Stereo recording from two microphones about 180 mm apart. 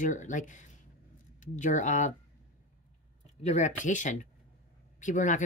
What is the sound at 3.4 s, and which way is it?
Speech, 40° left (ahead or behind).